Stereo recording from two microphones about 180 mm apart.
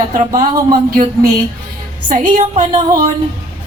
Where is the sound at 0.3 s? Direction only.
50° right (ahead or behind).